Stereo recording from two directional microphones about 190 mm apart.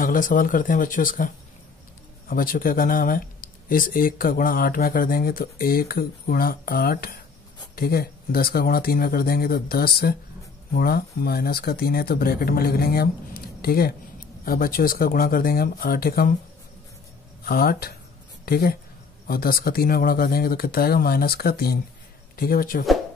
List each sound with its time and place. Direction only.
0.0 s speech: 45° left (ahead or behind)
17.5 s speech: 50° left (ahead or behind)